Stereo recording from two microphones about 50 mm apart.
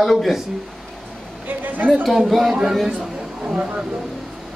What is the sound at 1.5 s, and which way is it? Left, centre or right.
Speech, right.